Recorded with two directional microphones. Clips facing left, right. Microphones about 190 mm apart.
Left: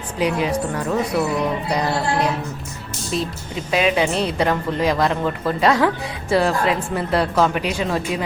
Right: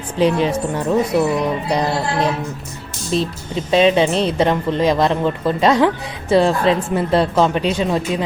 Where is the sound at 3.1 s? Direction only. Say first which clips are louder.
Right 5 dB; 30° right (ahead or behind).